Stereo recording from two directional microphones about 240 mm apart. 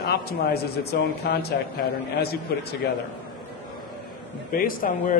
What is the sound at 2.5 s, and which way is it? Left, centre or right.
Speech, left.